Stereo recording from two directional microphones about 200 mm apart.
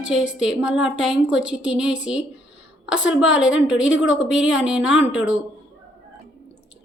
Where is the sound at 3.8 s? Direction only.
70° left (ahead or behind).